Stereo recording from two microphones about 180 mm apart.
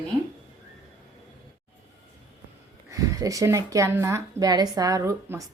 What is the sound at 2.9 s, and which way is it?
A woman's voice, 20° right (ahead or behind).